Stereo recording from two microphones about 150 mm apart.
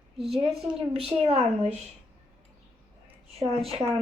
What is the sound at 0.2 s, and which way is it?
Speech, centre (ahead or behind).